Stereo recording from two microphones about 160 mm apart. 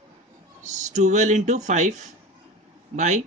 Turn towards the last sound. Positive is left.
turn(degrees=-45)  # may be behind; listen again after turning